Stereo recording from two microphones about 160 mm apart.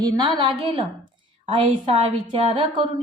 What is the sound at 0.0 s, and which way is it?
Speech, 30° right (ahead or behind).